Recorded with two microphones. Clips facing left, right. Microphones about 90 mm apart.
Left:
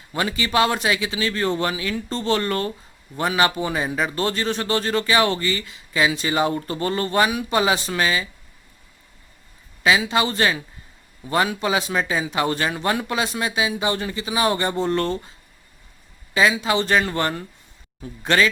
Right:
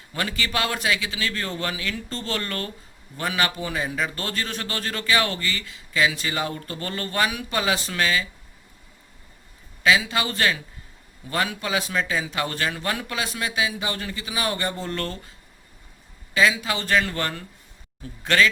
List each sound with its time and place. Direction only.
0.1 s a man's voice: 20° left (ahead or behind)
9.8 s a man's voice: 25° left (ahead or behind)
16.3 s a man's voice: 25° left (ahead or behind)